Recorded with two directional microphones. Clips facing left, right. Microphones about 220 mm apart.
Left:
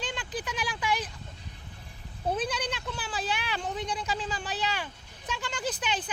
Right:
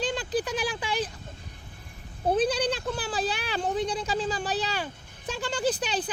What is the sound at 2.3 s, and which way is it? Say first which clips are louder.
Speech: right 8 dB; 35° right (ahead or behind).